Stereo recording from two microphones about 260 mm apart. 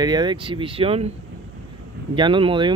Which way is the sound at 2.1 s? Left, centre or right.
Centre.